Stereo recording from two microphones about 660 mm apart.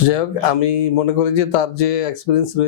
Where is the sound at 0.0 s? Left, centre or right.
Left.